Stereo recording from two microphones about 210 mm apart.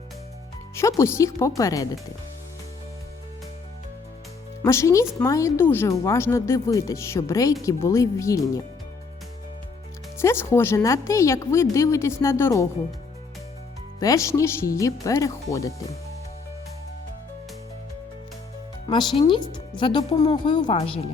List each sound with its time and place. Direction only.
0.8 s a woman's voice: 15° left (ahead or behind)
4.6 s a woman's voice: 15° left (ahead or behind)
10.2 s a woman's voice: 10° left (ahead or behind)
14.0 s a woman's voice: 15° left (ahead or behind)
18.9 s speech: 20° left (ahead or behind)